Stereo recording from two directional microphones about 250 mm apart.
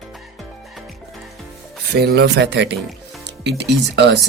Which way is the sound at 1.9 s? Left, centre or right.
Right.